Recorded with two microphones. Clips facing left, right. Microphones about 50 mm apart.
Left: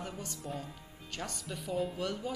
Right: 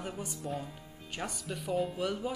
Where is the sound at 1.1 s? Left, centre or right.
Centre.